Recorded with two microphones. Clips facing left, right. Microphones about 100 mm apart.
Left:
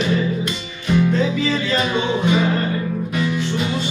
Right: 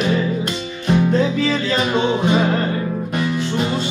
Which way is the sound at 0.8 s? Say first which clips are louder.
Right 1 dB; 40° right (ahead or behind).